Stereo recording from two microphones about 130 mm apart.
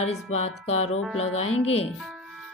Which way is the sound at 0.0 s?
55° left (ahead or behind).